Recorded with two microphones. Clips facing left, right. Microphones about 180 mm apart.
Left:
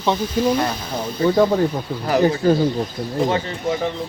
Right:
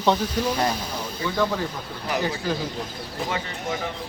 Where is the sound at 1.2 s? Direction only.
40° left (ahead or behind).